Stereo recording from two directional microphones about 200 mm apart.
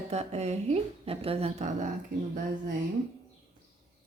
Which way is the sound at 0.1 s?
35° right (ahead or behind).